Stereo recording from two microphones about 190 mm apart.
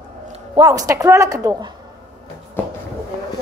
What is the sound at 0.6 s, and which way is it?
A woman's voice, 20° right (ahead or behind).